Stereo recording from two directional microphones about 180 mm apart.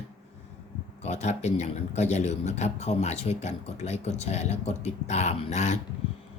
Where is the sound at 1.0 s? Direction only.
40° left (ahead or behind).